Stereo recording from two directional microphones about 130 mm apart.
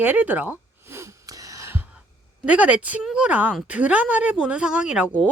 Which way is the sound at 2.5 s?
10° right (ahead or behind).